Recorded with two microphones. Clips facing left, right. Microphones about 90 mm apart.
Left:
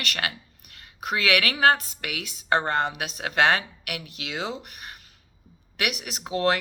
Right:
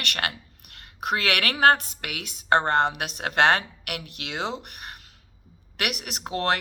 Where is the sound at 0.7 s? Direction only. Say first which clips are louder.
Right 2 dB; 60° right (ahead or behind).